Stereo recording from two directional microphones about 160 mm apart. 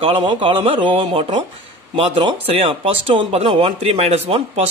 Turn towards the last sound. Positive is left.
turn(degrees=-40)  # may be behind; listen again after turning